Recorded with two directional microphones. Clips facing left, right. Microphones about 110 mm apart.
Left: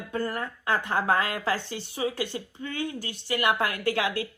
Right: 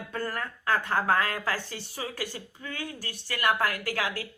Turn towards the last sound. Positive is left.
turn(degrees=25)  # may be behind; listen again after turning